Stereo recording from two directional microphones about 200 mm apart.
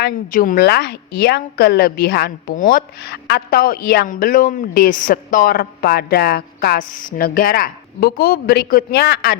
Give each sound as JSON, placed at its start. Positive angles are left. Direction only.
{"t": 0.0, "sound": "a woman's voice", "side_deg": 45}